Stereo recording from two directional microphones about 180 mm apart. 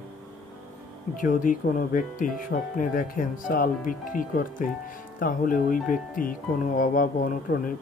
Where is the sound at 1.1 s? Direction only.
50° left (ahead or behind).